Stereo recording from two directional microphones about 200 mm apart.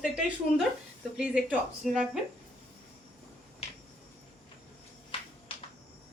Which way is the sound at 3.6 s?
30° left (ahead or behind).